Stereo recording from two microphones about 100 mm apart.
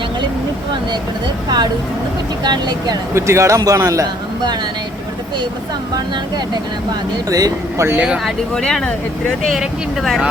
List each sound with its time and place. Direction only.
1.5 s speech: 45° right (ahead or behind)
3.2 s a man's voice: 30° right (ahead or behind)
7.3 s a man's voice: 35° right (ahead or behind)
8.0 s speech: 10° right (ahead or behind)
8.5 s speech: 5° left (ahead or behind)